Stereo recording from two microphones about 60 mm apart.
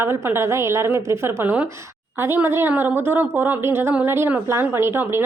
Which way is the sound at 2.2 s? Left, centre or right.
Right.